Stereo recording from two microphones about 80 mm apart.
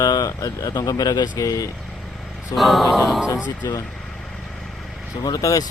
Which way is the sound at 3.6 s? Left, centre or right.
Left.